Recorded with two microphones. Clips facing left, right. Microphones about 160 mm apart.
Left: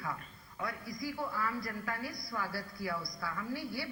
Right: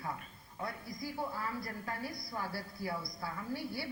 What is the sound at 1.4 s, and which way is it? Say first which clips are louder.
A woman's voice: left 3 dB; 25° right (ahead or behind).